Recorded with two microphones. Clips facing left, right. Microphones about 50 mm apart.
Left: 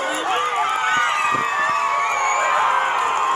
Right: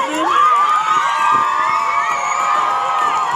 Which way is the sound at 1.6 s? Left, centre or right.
Right.